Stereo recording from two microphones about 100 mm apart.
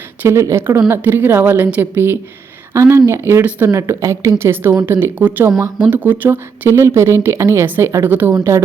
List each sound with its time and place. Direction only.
0.2 s speech: 25° right (ahead or behind)